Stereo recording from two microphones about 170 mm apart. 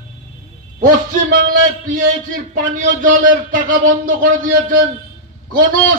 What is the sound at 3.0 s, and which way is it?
A man's voice, 50° right (ahead or behind).